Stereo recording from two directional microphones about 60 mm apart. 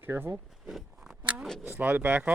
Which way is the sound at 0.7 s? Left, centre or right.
Centre.